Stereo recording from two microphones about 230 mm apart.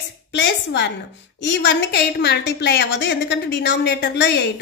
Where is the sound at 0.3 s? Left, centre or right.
Left.